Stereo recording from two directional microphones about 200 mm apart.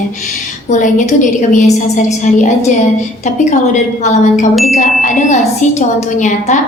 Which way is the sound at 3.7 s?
40° left (ahead or behind).